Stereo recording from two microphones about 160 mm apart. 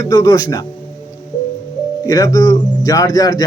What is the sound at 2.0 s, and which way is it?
Speech, 25° left (ahead or behind).